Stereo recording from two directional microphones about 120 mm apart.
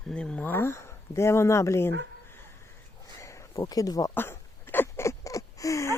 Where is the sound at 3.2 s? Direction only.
25° left (ahead or behind).